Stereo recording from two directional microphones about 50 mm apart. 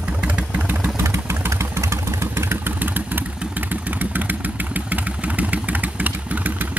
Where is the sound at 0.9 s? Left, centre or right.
Right.